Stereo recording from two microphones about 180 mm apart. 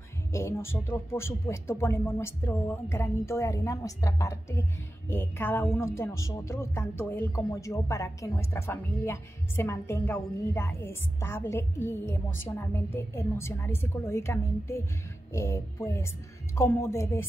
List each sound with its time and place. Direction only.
0.3 s speech: 15° left (ahead or behind)